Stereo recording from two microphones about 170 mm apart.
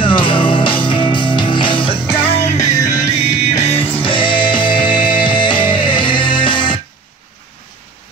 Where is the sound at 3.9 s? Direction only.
30° left (ahead or behind).